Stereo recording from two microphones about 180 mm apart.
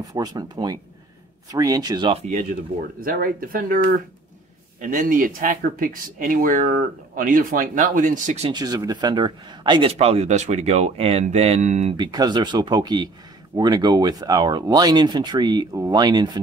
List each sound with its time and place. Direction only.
0.0 s speech: 20° right (ahead or behind)
3.0 s speech: 55° right (ahead or behind)
8.5 s speech: 20° right (ahead or behind); by 12.0 s 40° right (ahead or behind)
12.0 s speech: 25° right (ahead or behind)